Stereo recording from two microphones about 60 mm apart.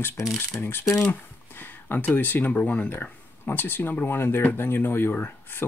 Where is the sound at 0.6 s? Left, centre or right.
Left.